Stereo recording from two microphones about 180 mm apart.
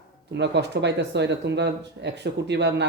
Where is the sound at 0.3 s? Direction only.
70° right (ahead or behind).